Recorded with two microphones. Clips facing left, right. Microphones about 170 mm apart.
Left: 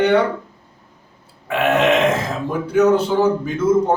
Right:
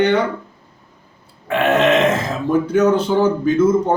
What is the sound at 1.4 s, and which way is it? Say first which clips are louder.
Speech: right 1 dB; 10° left (ahead or behind).